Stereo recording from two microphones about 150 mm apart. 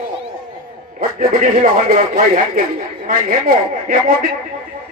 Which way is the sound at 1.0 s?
75° right (ahead or behind).